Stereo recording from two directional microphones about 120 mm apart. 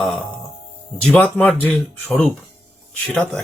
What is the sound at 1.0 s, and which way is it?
Speech, 5° left (ahead or behind).